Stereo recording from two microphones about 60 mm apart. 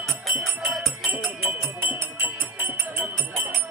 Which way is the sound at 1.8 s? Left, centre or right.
Right.